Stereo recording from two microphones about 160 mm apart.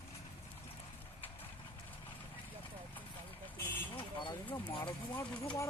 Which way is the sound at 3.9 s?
30° left (ahead or behind).